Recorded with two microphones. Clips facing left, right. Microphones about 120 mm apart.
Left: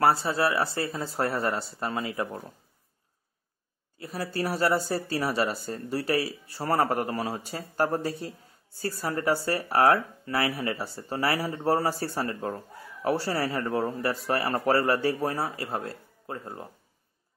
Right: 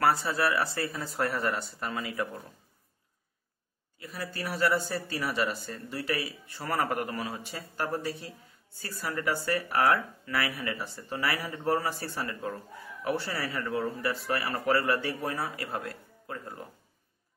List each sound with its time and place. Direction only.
0.0 s speech: 30° left (ahead or behind)
4.0 s speech: 40° left (ahead or behind)